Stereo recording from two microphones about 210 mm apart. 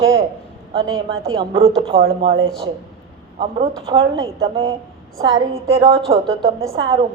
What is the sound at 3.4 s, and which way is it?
A woman's voice, 25° right (ahead or behind).